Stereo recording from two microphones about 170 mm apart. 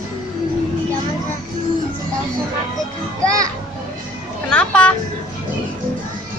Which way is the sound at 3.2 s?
20° right (ahead or behind).